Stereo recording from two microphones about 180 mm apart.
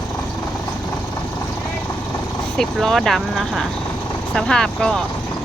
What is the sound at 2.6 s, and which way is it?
Speech, centre (ahead or behind).